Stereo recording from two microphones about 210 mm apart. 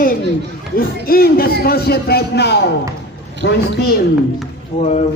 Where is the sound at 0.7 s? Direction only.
45° left (ahead or behind).